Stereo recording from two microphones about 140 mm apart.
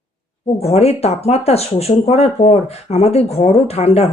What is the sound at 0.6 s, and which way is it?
Speech, 45° left (ahead or behind).